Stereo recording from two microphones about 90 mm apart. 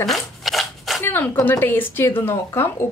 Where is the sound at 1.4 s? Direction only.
25° left (ahead or behind).